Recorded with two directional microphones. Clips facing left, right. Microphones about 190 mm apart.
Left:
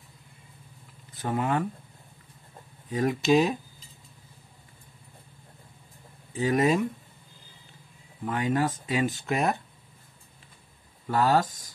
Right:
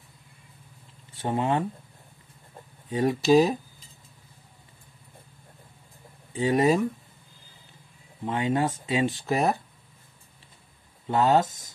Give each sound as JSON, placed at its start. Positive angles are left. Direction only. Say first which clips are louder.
{"t": 1.1, "sound": "speech", "louder": "right 2 dB", "side_deg": -25}
{"t": 2.9, "sound": "speech", "louder": "right 2 dB", "side_deg": -30}
{"t": 6.3, "sound": "speech", "louder": "right 2 dB", "side_deg": -30}
{"t": 8.3, "sound": "speech", "louder": "right 1 dB", "side_deg": -25}
{"t": 11.1, "sound": "speech", "louder": "right 2 dB", "side_deg": -25}